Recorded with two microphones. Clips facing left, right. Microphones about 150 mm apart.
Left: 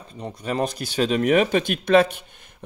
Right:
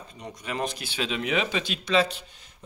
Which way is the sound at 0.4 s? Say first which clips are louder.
Left 6 dB; 40° left (ahead or behind).